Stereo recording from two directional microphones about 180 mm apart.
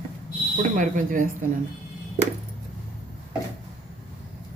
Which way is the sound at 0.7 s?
45° right (ahead or behind).